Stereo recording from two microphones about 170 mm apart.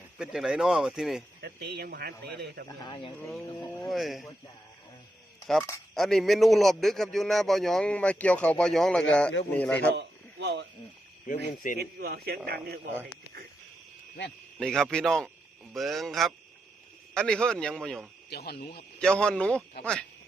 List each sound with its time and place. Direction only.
0.2 s a man's voice: 5° right (ahead or behind)
1.4 s a man's voice: 75° right (ahead or behind)
2.6 s speech: 30° left (ahead or behind)
3.8 s a man's voice: centre (ahead or behind)
5.5 s a man's voice: centre (ahead or behind)
9.9 s a sound: 85° right
11.3 s speech: 50° left (ahead or behind)
11.8 s a man's voice: 65° right (ahead or behind)
14.6 s a man's voice: 5° left (ahead or behind)
18.3 s speech: 70° left (ahead or behind)
18.9 s a man's voice: 5° left (ahead or behind)